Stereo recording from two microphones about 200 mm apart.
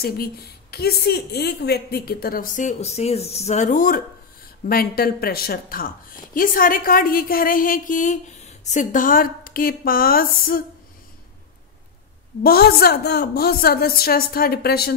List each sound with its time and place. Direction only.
0.0 s a woman's voice: 50° left (ahead or behind)
12.4 s a woman's voice: 50° left (ahead or behind)